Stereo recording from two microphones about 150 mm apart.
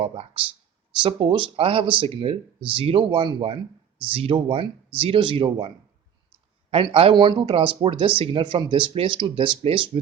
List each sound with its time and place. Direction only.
0.0 s speech: 40° right (ahead or behind)